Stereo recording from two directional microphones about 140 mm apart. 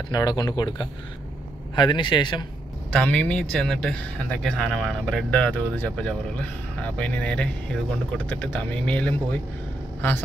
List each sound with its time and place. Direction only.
0.1 s a man's voice: 30° left (ahead or behind)
2.9 s speech: 10° left (ahead or behind)